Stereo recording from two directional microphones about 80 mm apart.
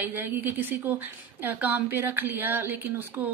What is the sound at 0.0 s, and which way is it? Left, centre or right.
A woman's voice, right.